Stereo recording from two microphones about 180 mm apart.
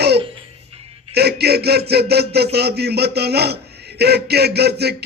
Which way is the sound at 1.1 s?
65° right (ahead or behind).